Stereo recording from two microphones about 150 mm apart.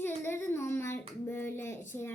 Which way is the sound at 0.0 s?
15° left (ahead or behind).